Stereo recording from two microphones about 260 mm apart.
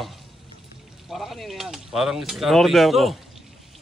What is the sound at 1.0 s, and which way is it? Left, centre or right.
Speech, centre.